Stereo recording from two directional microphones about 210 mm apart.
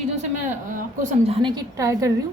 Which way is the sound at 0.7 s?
30° right (ahead or behind).